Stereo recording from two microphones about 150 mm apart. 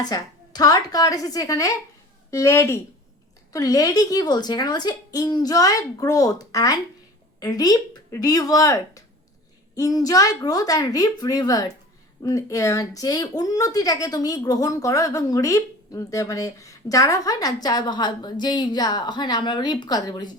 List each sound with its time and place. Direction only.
0.0 s speech: 25° left (ahead or behind)